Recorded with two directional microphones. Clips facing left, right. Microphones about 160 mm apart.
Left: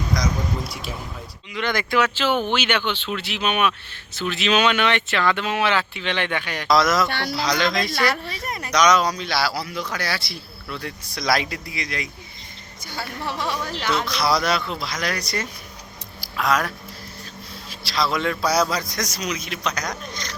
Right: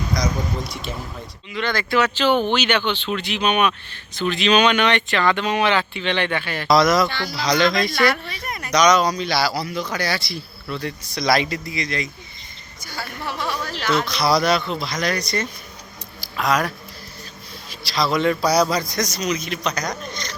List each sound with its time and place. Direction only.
0.7 s speech: 5° left (ahead or behind)
1.5 s speech: 15° left (ahead or behind); by 7.1 s centre (ahead or behind)
7.1 s speech: 60° left (ahead or behind)
7.3 s speech: centre (ahead or behind)
8.4 s a sound: 30° left (ahead or behind)
8.7 s speech: centre (ahead or behind)
13.5 s speech: 20° left (ahead or behind)
13.8 s speech: 5° left (ahead or behind)